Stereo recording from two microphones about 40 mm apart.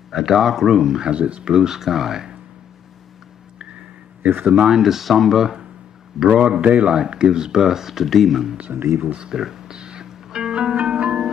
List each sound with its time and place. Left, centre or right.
0.1 s speech: centre
1.1 s speech: right
4.5 s speech: right
4.7 s speech: centre
6.1 s speech: centre
6.6 s speech: right
7.0 s speech: centre
8.7 s speech: right
9.1 s speech: right
9.4 s music: centre
10.5 s music: right